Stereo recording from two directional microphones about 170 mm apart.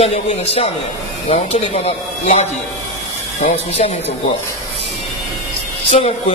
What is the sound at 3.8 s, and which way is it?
Speech, 40° left (ahead or behind).